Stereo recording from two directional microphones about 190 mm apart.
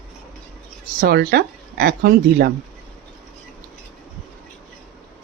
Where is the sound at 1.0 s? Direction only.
55° right (ahead or behind).